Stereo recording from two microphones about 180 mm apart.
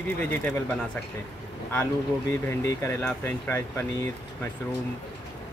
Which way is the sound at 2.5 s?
15° left (ahead or behind).